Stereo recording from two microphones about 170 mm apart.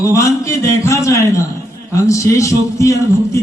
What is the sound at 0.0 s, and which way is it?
A man's voice, 20° left (ahead or behind).